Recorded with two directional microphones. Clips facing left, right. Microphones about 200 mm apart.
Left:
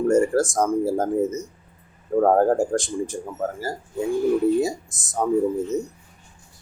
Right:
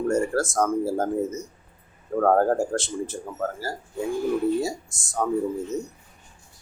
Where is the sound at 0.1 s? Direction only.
20° left (ahead or behind).